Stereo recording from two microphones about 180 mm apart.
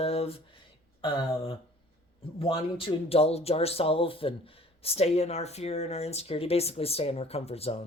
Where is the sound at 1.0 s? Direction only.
30° left (ahead or behind).